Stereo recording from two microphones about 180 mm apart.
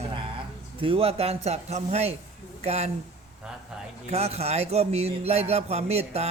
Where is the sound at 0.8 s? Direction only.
30° right (ahead or behind).